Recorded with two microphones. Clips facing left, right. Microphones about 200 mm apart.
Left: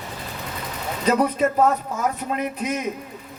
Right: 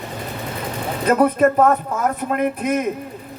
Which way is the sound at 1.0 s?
55° right (ahead or behind).